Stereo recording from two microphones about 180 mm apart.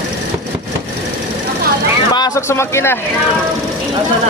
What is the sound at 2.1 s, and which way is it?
Speech, 20° left (ahead or behind).